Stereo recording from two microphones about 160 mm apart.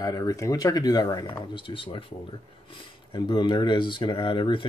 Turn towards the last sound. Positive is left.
turn(degrees=30)  # may be behind; listen again after turning